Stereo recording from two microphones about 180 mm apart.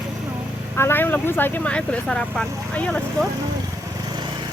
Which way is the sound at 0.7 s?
10° left (ahead or behind).